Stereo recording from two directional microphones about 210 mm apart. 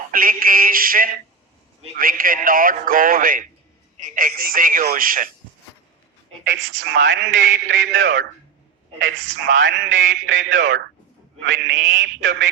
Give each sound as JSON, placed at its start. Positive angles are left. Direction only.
{"t": 0.1, "sound": "a sound", "side_deg": -40}
{"t": 2.0, "sound": "a man's voice", "side_deg": -40}
{"t": 6.4, "sound": "speech", "side_deg": -65}